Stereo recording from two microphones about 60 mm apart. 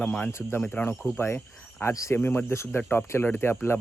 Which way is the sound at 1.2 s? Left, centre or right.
Left.